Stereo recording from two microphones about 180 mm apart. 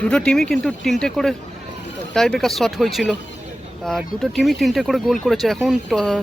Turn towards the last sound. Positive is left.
turn(degrees=5)  # may be behind; listen again after turning